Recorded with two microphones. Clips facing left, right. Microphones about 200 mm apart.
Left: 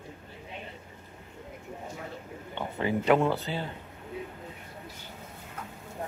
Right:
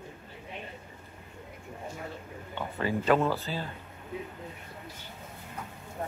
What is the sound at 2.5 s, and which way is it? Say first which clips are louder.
Speech: left 2 dB; 20° left (ahead or behind).